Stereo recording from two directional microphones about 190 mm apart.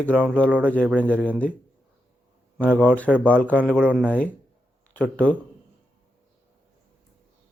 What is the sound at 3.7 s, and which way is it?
Speech, 5° right (ahead or behind).